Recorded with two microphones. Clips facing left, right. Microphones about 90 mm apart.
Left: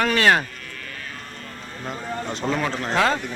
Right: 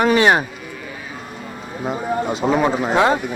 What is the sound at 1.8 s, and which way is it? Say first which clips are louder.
Speech: right 8 dB; 15° right (ahead or behind).